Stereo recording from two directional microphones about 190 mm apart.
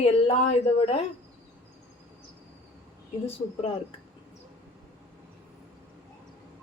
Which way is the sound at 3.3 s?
30° left (ahead or behind).